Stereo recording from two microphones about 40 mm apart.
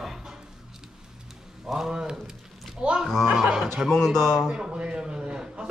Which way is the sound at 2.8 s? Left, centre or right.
Right.